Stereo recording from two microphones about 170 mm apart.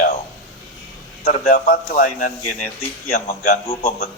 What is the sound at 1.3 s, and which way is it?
A man's voice, 50° left (ahead or behind).